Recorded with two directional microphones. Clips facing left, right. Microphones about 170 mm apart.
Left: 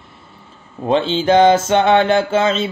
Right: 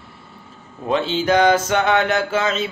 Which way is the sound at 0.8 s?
30° left (ahead or behind).